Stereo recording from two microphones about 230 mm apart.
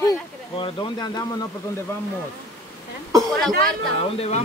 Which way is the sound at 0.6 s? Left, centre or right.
Left.